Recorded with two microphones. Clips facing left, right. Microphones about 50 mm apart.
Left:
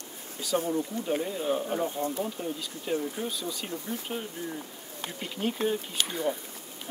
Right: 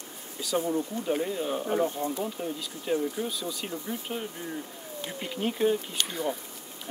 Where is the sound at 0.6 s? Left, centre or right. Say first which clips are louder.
Right 1 dB; centre.